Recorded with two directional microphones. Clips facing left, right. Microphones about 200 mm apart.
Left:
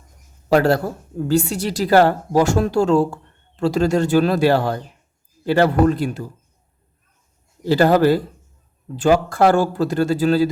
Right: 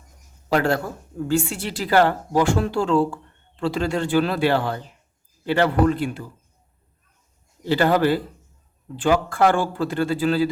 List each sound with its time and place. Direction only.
0.5 s a woman's voice: 40° left (ahead or behind)
7.6 s a woman's voice: 40° left (ahead or behind)